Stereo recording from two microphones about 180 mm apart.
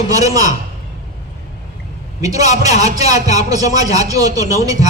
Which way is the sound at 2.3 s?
40° left (ahead or behind).